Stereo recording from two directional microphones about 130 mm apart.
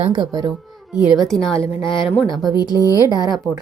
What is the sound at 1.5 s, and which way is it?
Speech, 40° left (ahead or behind).